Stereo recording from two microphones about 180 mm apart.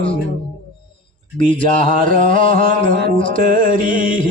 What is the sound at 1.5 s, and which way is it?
Speech, 30° left (ahead or behind).